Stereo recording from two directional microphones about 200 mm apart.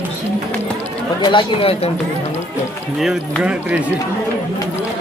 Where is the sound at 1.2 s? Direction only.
25° left (ahead or behind).